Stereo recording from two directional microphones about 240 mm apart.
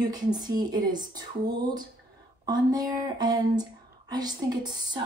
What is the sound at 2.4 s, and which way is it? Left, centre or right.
Speech, centre.